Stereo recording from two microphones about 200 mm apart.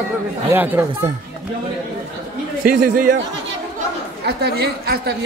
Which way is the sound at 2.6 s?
45° right (ahead or behind).